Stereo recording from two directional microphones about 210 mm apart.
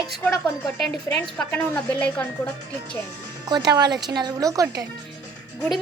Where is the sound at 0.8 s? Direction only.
5° left (ahead or behind).